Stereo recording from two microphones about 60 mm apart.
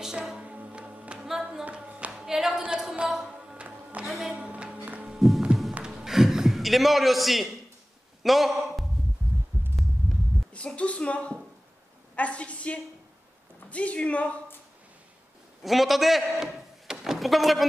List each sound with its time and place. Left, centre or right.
0.0 s music: centre
1.2 s a sound: centre
1.6 s clapping: right
2.1 s clapping: centre
2.6 s a sound: centre
4.0 s music: centre
4.4 s music: centre
5.5 s heart sounds: centre
5.9 s a sound: centre
8.2 s a man's voice: centre
10.8 s a woman's voice: centre
15.6 s a man's voice: centre